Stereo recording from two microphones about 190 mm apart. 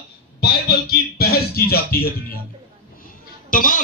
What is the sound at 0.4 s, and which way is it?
Speech, 55° left (ahead or behind).